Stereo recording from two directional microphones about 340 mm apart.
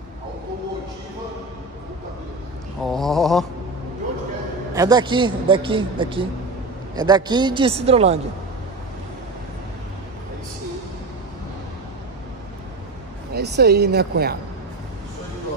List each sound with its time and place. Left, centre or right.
2.8 s a sound: centre
4.7 s a man's voice: centre
13.3 s speech: right